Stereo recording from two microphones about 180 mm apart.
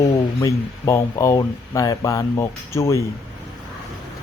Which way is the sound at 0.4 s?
15° left (ahead or behind).